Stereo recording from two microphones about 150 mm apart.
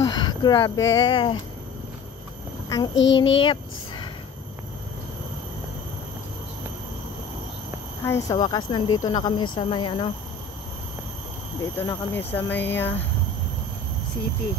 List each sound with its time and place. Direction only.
0.0 s speech: 25° left (ahead or behind)
2.7 s speech: 25° left (ahead or behind)
8.0 s speech: 20° left (ahead or behind)
11.8 s speech: 15° left (ahead or behind)